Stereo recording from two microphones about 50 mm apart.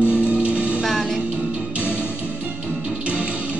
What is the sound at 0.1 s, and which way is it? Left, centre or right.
Music, right.